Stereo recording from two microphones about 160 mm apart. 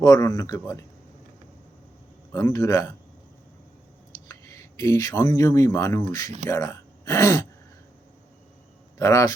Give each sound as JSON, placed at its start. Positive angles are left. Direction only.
{"t": 0.0, "sound": "speech", "side_deg": 20}
{"t": 2.3, "sound": "speech", "side_deg": 20}
{"t": 4.3, "sound": "speech", "side_deg": 20}
{"t": 9.0, "sound": "speech", "side_deg": 20}